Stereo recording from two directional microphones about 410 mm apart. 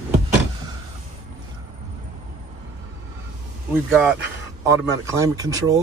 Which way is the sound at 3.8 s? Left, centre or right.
Centre.